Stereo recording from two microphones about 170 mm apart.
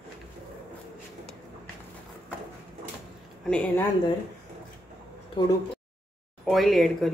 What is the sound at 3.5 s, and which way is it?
Speech, 5° left (ahead or behind).